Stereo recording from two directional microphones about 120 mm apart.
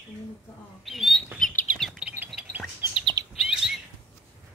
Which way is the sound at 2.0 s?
15° right (ahead or behind).